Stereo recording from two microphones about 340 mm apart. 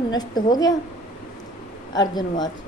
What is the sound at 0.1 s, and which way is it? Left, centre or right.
Mantra, centre.